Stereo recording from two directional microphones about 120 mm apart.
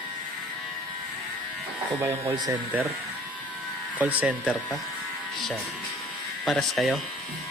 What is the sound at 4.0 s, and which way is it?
Speech, 10° right (ahead or behind).